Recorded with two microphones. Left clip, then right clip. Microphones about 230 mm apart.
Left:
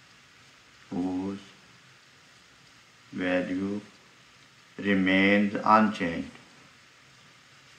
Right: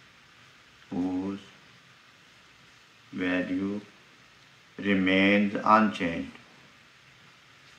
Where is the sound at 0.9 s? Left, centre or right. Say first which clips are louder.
Right 1 dB; centre.